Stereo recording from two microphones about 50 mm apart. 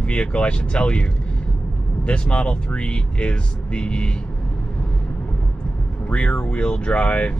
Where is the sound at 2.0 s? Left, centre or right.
Left.